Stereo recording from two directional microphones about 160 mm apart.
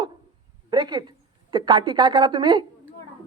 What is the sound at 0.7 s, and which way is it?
A woman's voice, 25° right (ahead or behind).